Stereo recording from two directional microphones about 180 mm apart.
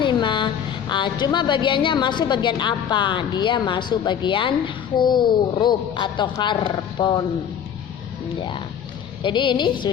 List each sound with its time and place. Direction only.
0.0 s a woman's voice: 25° left (ahead or behind)
8.4 s a woman's voice: 25° left (ahead or behind)